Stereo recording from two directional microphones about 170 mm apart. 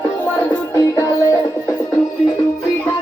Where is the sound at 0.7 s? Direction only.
20° left (ahead or behind).